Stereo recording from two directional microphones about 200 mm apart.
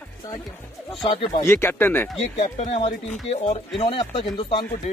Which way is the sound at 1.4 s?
10° left (ahead or behind).